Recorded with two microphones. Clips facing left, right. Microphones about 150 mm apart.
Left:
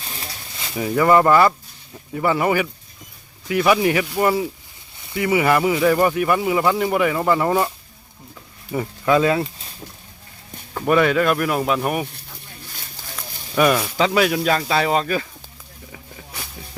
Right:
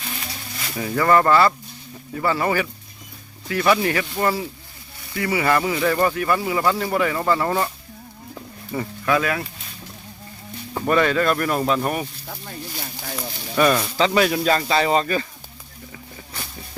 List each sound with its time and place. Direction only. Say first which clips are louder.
0.6 s speech: left 3 dB; 15° left (ahead or behind)
8.7 s speech: left 3 dB; 20° left (ahead or behind)
10.8 s speech: left 2 dB; 10° left (ahead or behind)
13.6 s speech: left 1 dB; 5° left (ahead or behind)
15.9 s a sound: left 1 dB; 5° left (ahead or behind)